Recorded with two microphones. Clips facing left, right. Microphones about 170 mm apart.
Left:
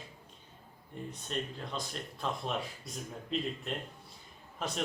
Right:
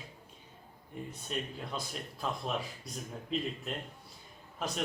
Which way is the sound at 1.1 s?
5° right (ahead or behind).